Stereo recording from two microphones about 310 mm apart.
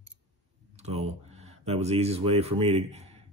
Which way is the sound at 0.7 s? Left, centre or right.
Right.